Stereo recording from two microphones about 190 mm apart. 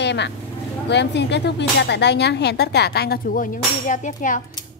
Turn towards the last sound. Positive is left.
turn(degrees=45)  # may be behind; listen again after turning